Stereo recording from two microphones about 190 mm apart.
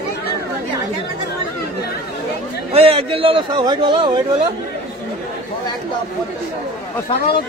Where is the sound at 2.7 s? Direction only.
30° right (ahead or behind).